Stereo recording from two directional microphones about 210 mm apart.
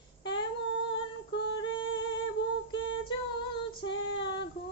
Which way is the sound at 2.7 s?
20° left (ahead or behind).